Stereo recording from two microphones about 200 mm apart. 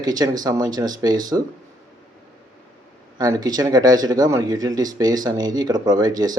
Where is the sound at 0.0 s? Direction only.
20° right (ahead or behind).